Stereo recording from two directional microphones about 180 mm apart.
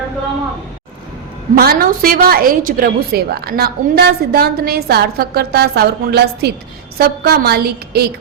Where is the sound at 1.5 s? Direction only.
55° right (ahead or behind).